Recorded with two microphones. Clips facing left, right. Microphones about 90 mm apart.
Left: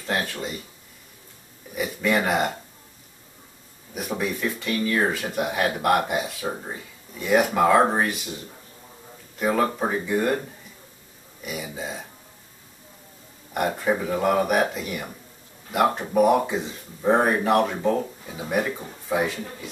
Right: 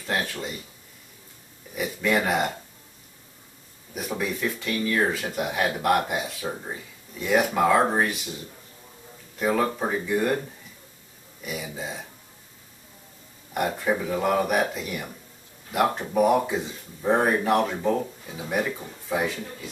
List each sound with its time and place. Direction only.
0.0 s speech: centre (ahead or behind)
1.8 s speech: centre (ahead or behind)
3.9 s speech: 5° left (ahead or behind)
6.4 s speech: 15° left (ahead or behind)
6.7 s speech: 5° left (ahead or behind)
9.4 s speech: 10° left (ahead or behind)
11.4 s speech: centre (ahead or behind)
13.5 s speech: 5° left (ahead or behind)
18.7 s speech: 15° left (ahead or behind)